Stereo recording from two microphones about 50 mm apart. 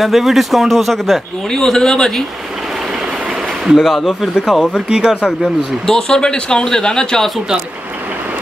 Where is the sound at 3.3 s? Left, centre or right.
Centre.